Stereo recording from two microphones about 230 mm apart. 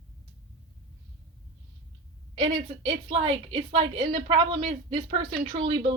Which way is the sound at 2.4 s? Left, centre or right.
Right.